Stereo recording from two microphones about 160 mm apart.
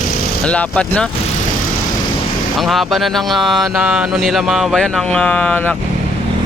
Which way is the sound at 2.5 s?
Centre (ahead or behind).